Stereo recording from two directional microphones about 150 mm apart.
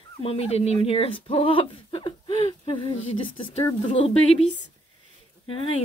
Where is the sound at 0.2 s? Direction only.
40° left (ahead or behind).